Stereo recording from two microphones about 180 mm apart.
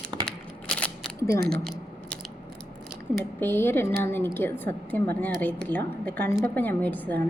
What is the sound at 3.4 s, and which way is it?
A woman's voice, 10° left (ahead or behind).